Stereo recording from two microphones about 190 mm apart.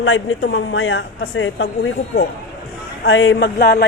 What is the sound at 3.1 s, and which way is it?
Speech, 90° left.